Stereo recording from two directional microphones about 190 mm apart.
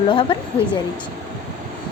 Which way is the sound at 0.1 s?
25° left (ahead or behind).